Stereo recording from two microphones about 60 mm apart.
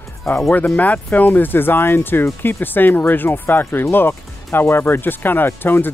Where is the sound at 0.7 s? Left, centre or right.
Left.